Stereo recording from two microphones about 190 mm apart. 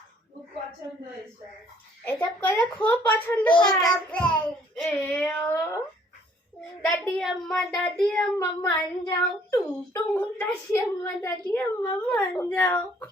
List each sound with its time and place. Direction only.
2.0 s child singing: 10° left (ahead or behind)
7.2 s child singing: centre (ahead or behind)